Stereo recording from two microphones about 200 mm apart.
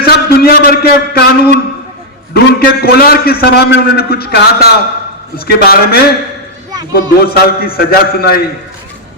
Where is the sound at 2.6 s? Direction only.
50° left (ahead or behind).